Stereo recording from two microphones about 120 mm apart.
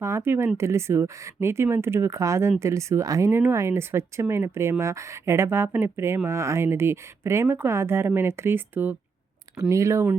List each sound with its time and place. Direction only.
0.0 s speech: 20° right (ahead or behind)